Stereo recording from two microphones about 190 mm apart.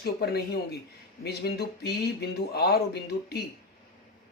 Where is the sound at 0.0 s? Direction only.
60° left (ahead or behind).